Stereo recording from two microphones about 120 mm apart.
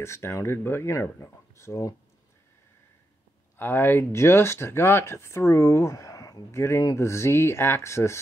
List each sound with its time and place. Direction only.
0.0 s speech: 20° left (ahead or behind)
3.5 s speech: 15° left (ahead or behind)